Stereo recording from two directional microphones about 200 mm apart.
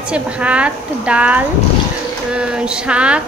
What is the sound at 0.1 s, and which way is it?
A woman's voice, 5° right (ahead or behind).